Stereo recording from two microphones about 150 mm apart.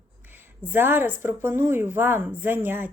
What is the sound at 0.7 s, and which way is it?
A woman's voice, 15° right (ahead or behind).